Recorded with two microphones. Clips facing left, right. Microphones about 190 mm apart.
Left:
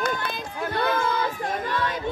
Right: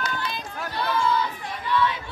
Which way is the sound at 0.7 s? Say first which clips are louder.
Even; 50° left (ahead or behind).